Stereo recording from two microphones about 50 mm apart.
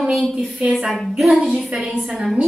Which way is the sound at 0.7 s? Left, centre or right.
Centre.